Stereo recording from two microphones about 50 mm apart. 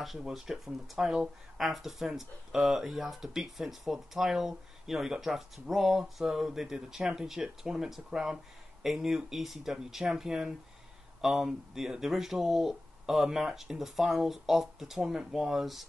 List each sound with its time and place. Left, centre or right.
0.0 s speech: centre
0.7 s speech: centre
1.6 s speech: centre